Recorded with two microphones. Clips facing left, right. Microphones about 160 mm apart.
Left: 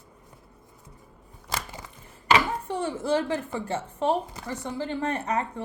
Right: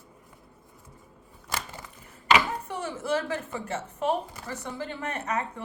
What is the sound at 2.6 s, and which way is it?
Speech, 30° left (ahead or behind).